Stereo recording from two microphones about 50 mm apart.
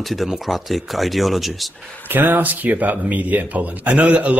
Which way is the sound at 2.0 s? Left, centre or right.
Right.